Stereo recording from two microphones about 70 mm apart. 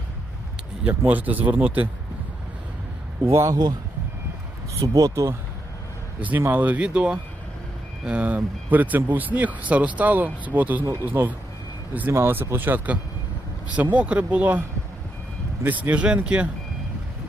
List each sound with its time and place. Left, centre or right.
0.9 s speech: right
3.3 s speech: right
4.8 s speech: right
6.1 s speech: right
15.6 s speech: right